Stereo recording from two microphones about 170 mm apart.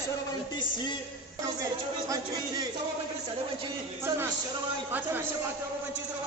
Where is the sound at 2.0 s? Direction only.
20° right (ahead or behind).